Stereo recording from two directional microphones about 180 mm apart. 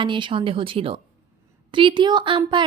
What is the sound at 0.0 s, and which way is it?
A woman's voice, 25° right (ahead or behind).